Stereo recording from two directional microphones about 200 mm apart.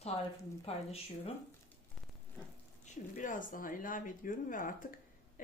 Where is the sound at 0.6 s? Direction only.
30° left (ahead or behind).